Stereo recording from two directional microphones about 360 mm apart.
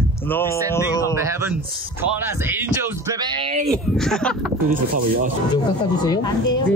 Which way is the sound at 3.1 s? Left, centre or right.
Centre.